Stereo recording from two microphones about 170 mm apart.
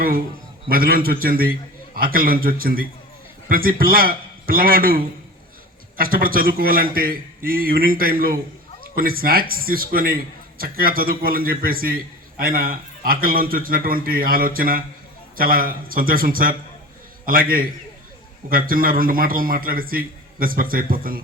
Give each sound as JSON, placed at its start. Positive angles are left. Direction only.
{"t": 0.7, "sound": "a man's voice", "side_deg": -60}